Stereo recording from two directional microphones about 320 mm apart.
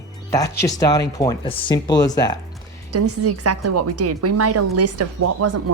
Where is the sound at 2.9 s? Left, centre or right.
Right.